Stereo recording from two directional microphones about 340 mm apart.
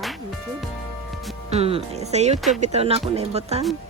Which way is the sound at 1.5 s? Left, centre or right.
Centre.